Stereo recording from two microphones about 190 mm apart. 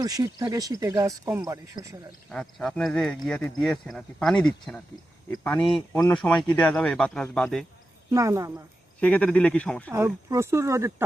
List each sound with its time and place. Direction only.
0.0 s speech: 20° right (ahead or behind)
2.3 s speech: 5° left (ahead or behind)
8.1 s speech: 15° right (ahead or behind)
9.0 s speech: 5° left (ahead or behind)
9.9 s speech: 15° right (ahead or behind)